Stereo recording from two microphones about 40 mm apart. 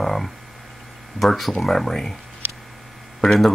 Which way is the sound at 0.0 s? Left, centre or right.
Centre.